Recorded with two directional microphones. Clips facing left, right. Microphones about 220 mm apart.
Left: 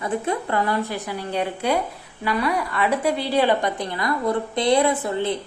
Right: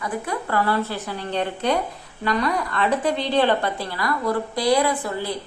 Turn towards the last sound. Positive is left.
turn(degrees=20)  # may be behind; listen again after turning